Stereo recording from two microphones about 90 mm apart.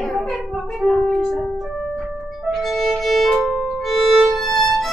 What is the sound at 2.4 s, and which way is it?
Violin, centre (ahead or behind).